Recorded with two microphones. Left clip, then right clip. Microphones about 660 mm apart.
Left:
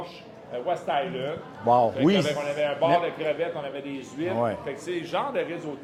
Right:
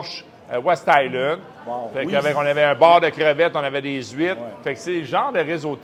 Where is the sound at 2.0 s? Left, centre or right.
Right.